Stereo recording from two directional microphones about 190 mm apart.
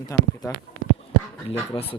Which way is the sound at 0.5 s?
15° left (ahead or behind).